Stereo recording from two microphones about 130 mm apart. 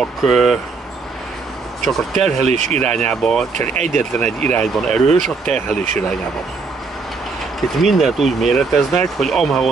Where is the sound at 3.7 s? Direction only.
60° right (ahead or behind).